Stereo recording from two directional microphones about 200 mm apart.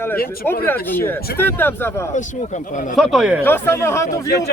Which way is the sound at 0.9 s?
10° left (ahead or behind).